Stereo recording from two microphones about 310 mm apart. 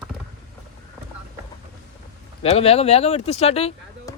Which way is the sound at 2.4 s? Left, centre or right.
Centre.